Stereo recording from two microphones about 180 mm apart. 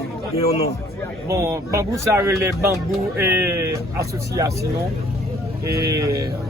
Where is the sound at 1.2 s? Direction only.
15° right (ahead or behind).